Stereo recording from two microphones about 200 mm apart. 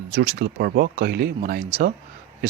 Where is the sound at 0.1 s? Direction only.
60° right (ahead or behind).